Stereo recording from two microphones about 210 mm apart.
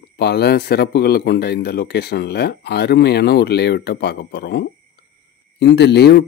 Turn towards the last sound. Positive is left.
turn(degrees=50)  # may be behind; listen again after turning